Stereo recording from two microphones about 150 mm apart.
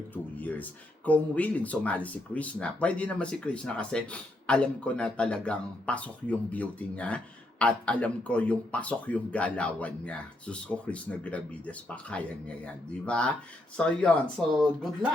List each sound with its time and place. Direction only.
0.1 s speech: 10° left (ahead or behind)